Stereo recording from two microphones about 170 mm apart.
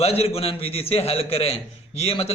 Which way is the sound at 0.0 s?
35° left (ahead or behind).